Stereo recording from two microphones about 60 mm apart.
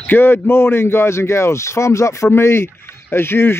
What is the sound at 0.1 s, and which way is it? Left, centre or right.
Speech, left.